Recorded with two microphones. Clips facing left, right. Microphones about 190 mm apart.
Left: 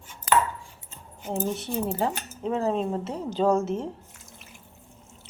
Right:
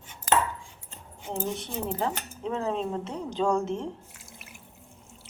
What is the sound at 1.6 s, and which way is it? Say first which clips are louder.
A woman's voice: left 4 dB; 5° left (ahead or behind).